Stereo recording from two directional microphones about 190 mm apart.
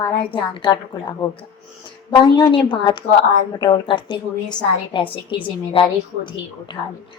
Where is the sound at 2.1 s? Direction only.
25° left (ahead or behind).